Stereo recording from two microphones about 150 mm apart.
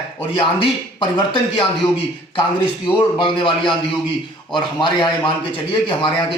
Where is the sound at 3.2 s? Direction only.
35° left (ahead or behind).